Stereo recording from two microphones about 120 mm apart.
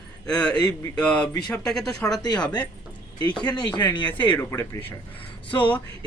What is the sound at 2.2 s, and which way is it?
Speech, 35° left (ahead or behind).